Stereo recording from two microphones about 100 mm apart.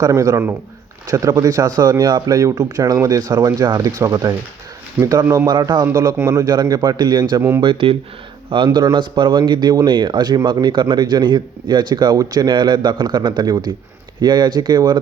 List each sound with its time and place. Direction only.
0.1 s speech: 30° right (ahead or behind)
1.1 s speech: 40° right (ahead or behind)
5.0 s speech: 15° right (ahead or behind)
5.5 s speech: 50° right (ahead or behind)
6.1 s speech: 25° right (ahead or behind)
6.4 s speech: 45° right (ahead or behind)
7.6 s speech: 60° right (ahead or behind)